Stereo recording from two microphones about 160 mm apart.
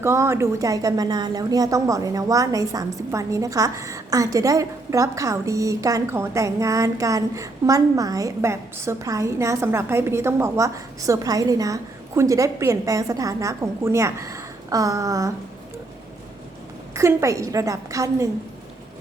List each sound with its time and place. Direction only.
0.0 s a woman's voice: 15° right (ahead or behind)
16.9 s a woman's voice: 15° right (ahead or behind)